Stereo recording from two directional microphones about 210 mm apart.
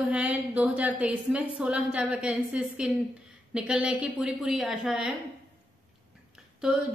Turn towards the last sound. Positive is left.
turn(degrees=-5)  # may be behind; listen again after turning